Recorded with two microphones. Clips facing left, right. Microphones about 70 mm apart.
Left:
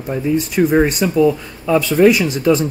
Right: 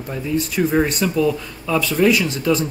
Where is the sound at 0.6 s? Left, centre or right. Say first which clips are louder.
Left 4 dB; centre.